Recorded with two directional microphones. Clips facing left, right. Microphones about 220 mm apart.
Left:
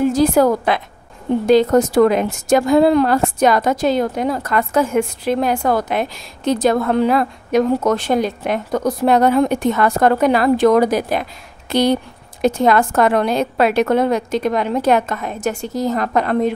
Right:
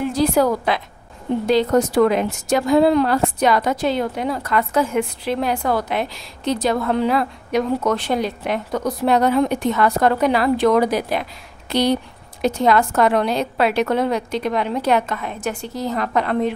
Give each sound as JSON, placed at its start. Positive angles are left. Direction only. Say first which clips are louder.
{"t": 0.0, "sound": "a woman's voice", "louder": "left 4 dB", "side_deg": 45}